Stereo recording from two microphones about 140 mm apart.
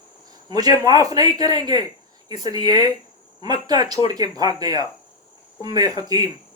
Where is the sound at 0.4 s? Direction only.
30° right (ahead or behind).